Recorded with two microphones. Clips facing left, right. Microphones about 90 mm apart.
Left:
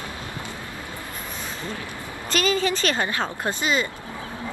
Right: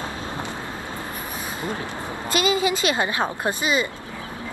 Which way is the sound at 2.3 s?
15° right (ahead or behind).